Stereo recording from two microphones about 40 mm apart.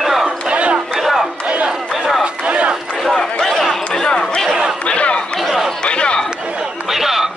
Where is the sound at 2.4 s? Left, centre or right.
Right.